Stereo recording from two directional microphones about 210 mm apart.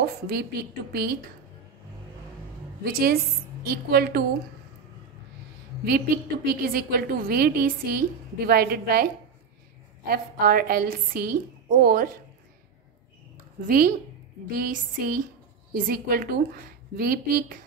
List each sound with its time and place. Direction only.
0.0 s a woman's voice: 45° right (ahead or behind)
2.8 s a woman's voice: 45° right (ahead or behind)
5.9 s a woman's voice: 45° right (ahead or behind)
13.7 s a woman's voice: 45° right (ahead or behind)
14.6 s a sound: 40° right (ahead or behind)
15.7 s a woman's voice: 45° right (ahead or behind)